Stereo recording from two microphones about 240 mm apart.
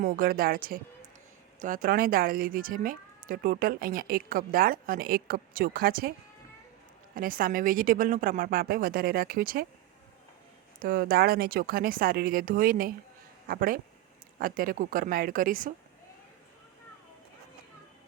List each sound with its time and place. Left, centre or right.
0.0 s speech: right
7.2 s speech: right
10.8 s speech: right